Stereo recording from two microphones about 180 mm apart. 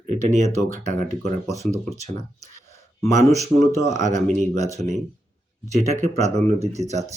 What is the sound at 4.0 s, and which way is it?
Speech, 40° right (ahead or behind).